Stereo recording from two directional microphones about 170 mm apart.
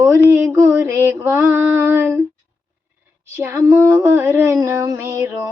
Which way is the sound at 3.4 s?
15° right (ahead or behind).